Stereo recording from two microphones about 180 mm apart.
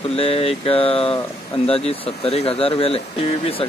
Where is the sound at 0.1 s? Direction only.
35° left (ahead or behind).